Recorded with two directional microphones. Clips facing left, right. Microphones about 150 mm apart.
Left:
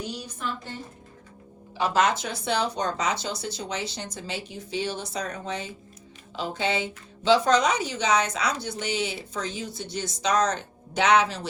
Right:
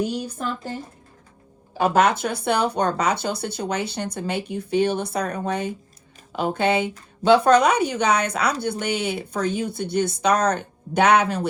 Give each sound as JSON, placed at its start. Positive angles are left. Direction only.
{"t": 0.3, "sound": "a woman's voice", "side_deg": -40}
{"t": 1.8, "sound": "speech", "side_deg": -55}